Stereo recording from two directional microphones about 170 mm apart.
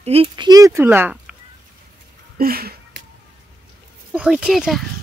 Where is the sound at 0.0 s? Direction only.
35° right (ahead or behind).